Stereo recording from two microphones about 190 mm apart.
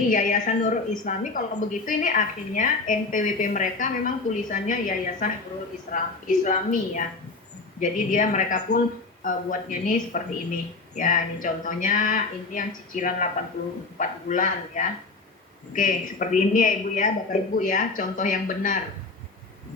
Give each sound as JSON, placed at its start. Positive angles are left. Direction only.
{"t": 0.1, "sound": "a woman's voice", "side_deg": 45}